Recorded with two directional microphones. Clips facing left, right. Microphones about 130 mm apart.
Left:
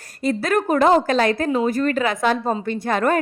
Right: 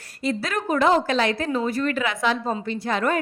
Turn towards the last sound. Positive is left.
turn(degrees=50)  # may be behind; listen again after turning